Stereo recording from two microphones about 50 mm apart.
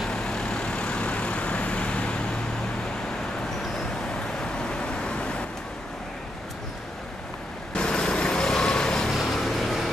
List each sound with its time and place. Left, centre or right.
0.1 s vehicle: centre
4.4 s vehicle: centre
7.7 s vehicle: centre